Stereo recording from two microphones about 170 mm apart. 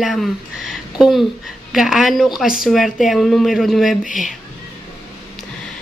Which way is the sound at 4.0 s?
50° left (ahead or behind).